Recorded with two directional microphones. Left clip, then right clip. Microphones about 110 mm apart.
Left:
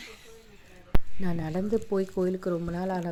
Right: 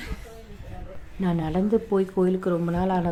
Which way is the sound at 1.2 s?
40° left (ahead or behind).